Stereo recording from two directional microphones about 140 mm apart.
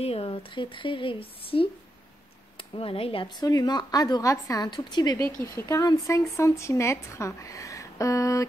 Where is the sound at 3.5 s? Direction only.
30° left (ahead or behind).